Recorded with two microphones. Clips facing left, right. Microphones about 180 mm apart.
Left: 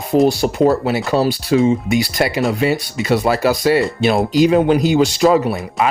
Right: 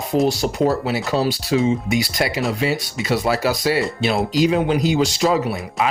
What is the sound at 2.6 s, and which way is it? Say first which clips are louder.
Speech: left 4 dB; 50° left (ahead or behind).